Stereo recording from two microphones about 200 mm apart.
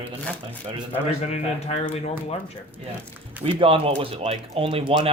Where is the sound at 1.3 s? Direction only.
30° left (ahead or behind).